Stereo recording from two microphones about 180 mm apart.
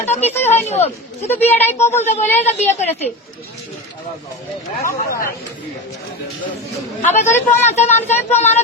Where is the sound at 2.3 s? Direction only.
40° left (ahead or behind).